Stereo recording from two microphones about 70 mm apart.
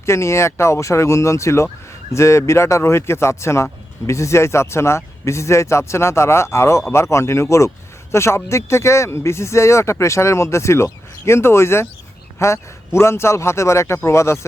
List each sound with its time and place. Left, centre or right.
0.0 s speech: left